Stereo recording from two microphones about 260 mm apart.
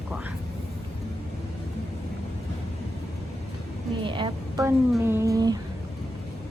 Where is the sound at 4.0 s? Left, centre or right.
Centre.